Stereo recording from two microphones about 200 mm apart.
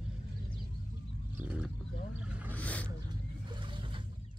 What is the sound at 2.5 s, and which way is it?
Vehicle, 5° left (ahead or behind).